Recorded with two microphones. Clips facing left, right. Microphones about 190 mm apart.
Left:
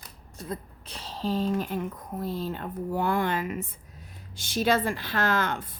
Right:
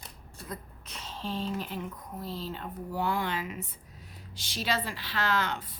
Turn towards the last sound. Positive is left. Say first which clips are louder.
# left 3 dB
turn(degrees=50)  # may be behind; listen again after turning